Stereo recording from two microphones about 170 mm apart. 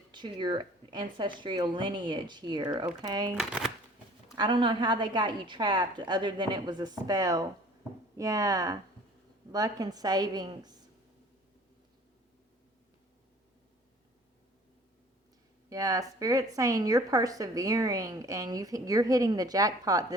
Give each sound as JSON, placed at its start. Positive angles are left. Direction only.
{"t": 0.1, "sound": "a woman's voice", "side_deg": -25}
{"t": 3.3, "sound": "speech", "side_deg": 0}
{"t": 4.4, "sound": "a woman's voice", "side_deg": -25}
{"t": 15.7, "sound": "a woman's voice", "side_deg": -20}